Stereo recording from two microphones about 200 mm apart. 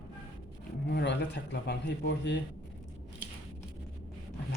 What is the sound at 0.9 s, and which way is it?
Speech, 60° left (ahead or behind).